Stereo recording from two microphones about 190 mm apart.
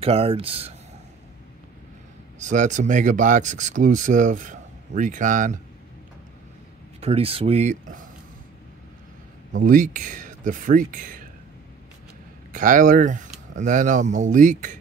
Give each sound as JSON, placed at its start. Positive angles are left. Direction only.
{"t": 0.0, "sound": "speech", "side_deg": -30}
{"t": 2.3, "sound": "speech", "side_deg": -40}
{"t": 7.0, "sound": "speech", "side_deg": -30}
{"t": 9.6, "sound": "speech", "side_deg": -45}
{"t": 12.5, "sound": "speech", "side_deg": -45}